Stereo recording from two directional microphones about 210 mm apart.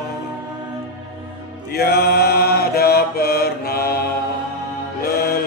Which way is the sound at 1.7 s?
50° left (ahead or behind).